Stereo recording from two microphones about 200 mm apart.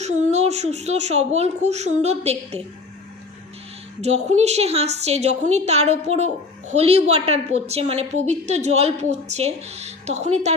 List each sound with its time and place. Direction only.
0.0 s a woman's voice: 35° right (ahead or behind)
4.0 s a woman's voice: 35° right (ahead or behind)